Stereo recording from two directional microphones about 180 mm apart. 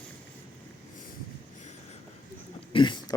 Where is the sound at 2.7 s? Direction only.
25° left (ahead or behind).